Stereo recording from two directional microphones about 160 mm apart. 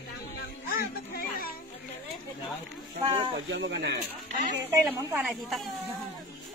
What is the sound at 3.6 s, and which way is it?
Speech, 90° right.